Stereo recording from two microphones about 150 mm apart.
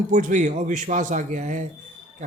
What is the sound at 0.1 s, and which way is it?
A man's voice, 55° right (ahead or behind).